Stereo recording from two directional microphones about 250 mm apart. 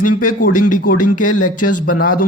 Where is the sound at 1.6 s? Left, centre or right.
Left.